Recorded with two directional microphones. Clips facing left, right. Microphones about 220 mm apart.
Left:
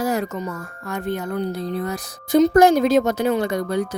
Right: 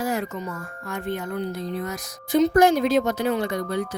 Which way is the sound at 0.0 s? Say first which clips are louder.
Left 4 dB; 40° left (ahead or behind).